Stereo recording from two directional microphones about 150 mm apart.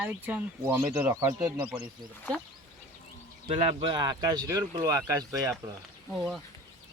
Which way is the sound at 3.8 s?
30° right (ahead or behind).